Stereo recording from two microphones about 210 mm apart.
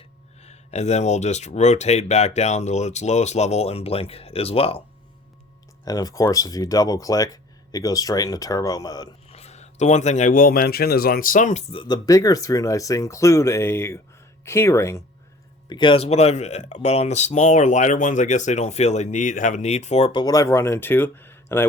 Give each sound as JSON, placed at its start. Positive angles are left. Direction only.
{"t": 0.4, "sound": "speech", "side_deg": 30}
{"t": 5.8, "sound": "speech", "side_deg": 15}
{"t": 9.3, "sound": "speech", "side_deg": 30}
{"t": 15.7, "sound": "speech", "side_deg": 25}